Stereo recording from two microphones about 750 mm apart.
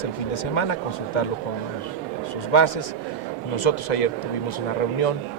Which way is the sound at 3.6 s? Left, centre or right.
Left.